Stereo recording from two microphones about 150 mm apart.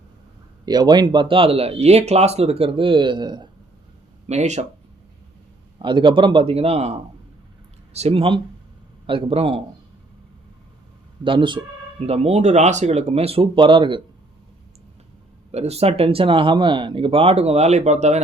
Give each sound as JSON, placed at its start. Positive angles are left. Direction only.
{"t": 0.6, "sound": "speech", "side_deg": -30}
{"t": 4.3, "sound": "speech", "side_deg": -50}
{"t": 5.8, "sound": "speech", "side_deg": -30}
{"t": 11.2, "sound": "speech", "side_deg": -35}
{"t": 15.5, "sound": "speech", "side_deg": -45}